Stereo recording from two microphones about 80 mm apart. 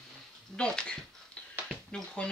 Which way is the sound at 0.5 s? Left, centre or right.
Centre.